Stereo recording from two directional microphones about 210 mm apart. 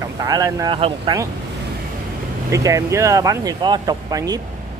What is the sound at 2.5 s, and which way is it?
Speech, 15° right (ahead or behind).